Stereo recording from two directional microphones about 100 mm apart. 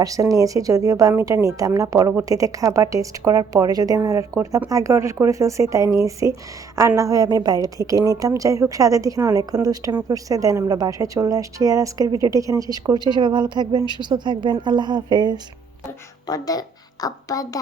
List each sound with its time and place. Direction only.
0.0 s speech: 35° right (ahead or behind)
16.2 s a woman's voice: 40° left (ahead or behind)